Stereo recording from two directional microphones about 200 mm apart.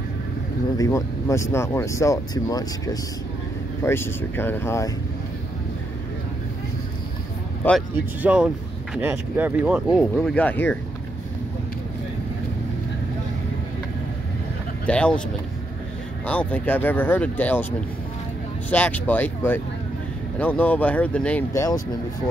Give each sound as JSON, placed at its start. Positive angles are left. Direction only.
{"t": 0.7, "sound": "speech", "side_deg": 15}
{"t": 7.6, "sound": "speech", "side_deg": 10}
{"t": 8.2, "sound": "speech", "side_deg": -5}
{"t": 14.9, "sound": "speech", "side_deg": 5}
{"t": 16.3, "sound": "speech", "side_deg": 5}